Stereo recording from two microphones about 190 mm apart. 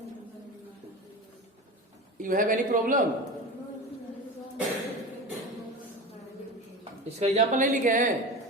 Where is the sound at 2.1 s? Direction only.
45° right (ahead or behind).